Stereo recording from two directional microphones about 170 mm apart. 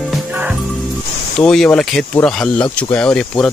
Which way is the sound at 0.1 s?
10° right (ahead or behind).